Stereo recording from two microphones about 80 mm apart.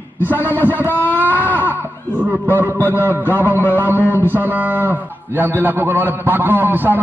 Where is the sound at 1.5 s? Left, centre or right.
Right.